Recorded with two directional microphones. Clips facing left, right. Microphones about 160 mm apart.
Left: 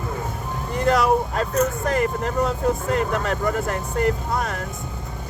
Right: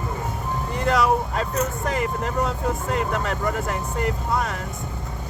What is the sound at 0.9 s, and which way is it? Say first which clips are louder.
Speech: left 2 dB; 45° left (ahead or behind).